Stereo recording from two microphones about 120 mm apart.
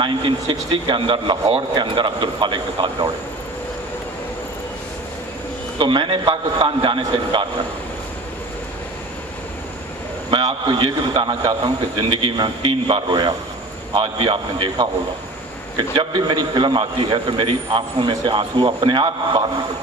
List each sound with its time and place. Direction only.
0.0 s a man's voice: 45° right (ahead or behind)
5.8 s a man's voice: 45° right (ahead or behind)
10.3 s a man's voice: 40° right (ahead or behind)
16.0 s a man's voice: 40° right (ahead or behind)